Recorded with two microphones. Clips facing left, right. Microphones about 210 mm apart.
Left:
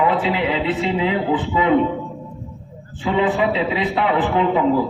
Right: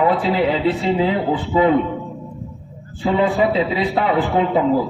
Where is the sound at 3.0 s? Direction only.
35° right (ahead or behind).